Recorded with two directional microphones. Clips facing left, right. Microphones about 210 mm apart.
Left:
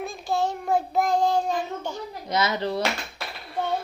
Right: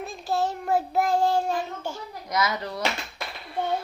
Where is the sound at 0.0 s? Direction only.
5° right (ahead or behind).